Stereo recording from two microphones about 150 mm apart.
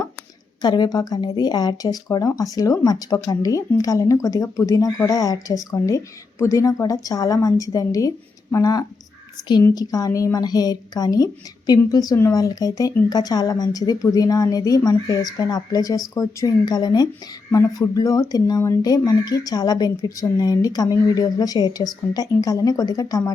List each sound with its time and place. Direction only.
0.6 s a woman's voice: 30° left (ahead or behind)